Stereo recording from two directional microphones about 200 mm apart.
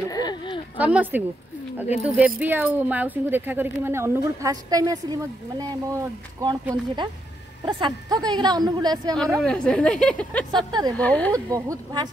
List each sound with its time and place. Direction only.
0.1 s a sound: 20° left (ahead or behind)
0.7 s a woman's voice: 5° right (ahead or behind)
9.4 s a woman's voice: 5° left (ahead or behind)
10.7 s a woman's voice: 20° right (ahead or behind)
11.0 s speech: 5° left (ahead or behind)
11.3 s speech: 15° right (ahead or behind)